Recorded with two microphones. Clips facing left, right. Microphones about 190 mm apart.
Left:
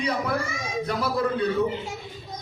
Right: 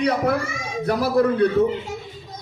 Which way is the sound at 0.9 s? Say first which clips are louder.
Right 8 dB; 65° right (ahead or behind).